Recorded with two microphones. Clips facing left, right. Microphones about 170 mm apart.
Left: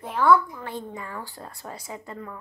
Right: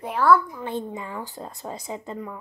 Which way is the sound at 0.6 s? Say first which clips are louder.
Right 4 dB; 20° right (ahead or behind).